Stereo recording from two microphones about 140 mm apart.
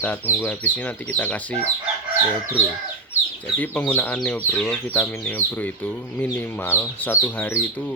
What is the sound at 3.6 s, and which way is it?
Speech, 15° left (ahead or behind).